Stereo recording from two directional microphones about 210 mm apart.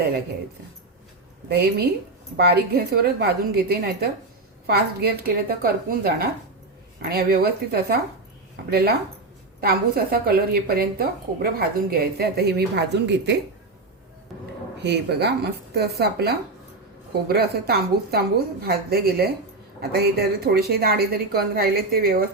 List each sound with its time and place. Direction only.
1.5 s a woman's voice: 50° right (ahead or behind)
14.8 s a woman's voice: 50° right (ahead or behind)